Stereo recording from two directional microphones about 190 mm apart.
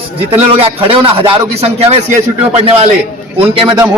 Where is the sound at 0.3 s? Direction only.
30° right (ahead or behind).